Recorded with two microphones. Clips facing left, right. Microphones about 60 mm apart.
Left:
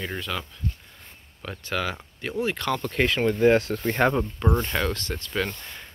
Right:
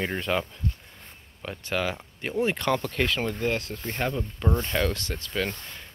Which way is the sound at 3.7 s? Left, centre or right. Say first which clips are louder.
Left 7 dB; left.